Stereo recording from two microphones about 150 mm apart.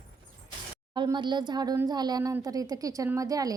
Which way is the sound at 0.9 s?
30° right (ahead or behind).